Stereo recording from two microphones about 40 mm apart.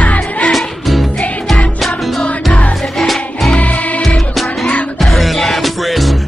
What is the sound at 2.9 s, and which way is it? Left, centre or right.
Music, centre.